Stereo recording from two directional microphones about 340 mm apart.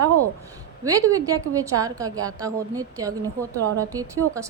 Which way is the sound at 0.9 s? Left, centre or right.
Centre.